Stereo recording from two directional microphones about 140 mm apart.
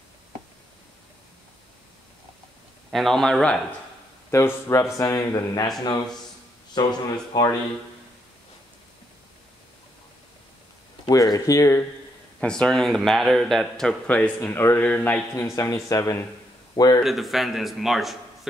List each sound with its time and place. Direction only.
2.9 s a man's voice: centre (ahead or behind)
4.3 s speech: 20° left (ahead or behind)
6.8 s speech: 30° left (ahead or behind)
11.1 s speech: 25° left (ahead or behind)
12.4 s a man's voice: 5° left (ahead or behind)
15.3 s speech: 25° left (ahead or behind)
17.0 s a man's voice: centre (ahead or behind)